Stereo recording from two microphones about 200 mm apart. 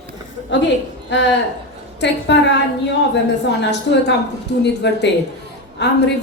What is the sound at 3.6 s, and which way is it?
A woman's voice, 60° left (ahead or behind).